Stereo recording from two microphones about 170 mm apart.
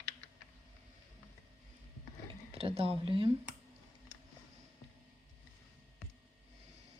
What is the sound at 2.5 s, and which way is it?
Speech, 35° right (ahead or behind).